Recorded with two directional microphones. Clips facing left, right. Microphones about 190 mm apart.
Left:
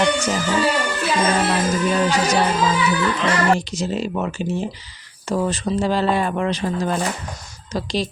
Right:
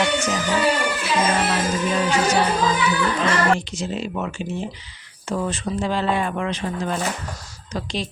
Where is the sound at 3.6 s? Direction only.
40° left (ahead or behind).